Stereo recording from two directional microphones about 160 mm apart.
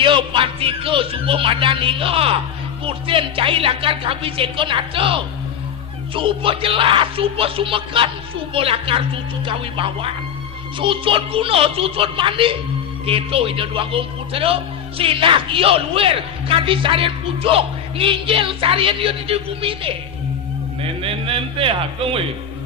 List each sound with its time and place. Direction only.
0.0 s a man's voice: 30° right (ahead or behind)
21.0 s a man's voice: 35° right (ahead or behind)